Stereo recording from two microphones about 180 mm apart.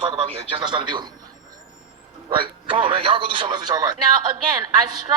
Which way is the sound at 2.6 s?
30° right (ahead or behind).